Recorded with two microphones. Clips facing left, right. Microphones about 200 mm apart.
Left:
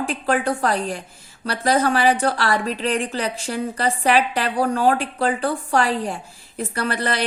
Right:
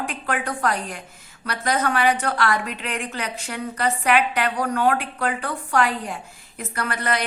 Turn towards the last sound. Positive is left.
turn(degrees=30)  # may be behind; listen again after turning